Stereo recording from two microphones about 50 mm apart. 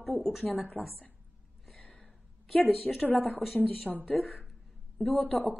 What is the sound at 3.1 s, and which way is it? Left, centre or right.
A woman's voice, left.